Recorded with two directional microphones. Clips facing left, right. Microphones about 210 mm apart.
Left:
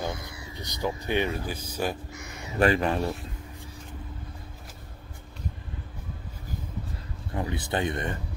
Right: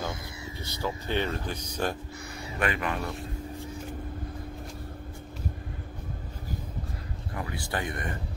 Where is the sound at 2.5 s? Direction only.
35° left (ahead or behind).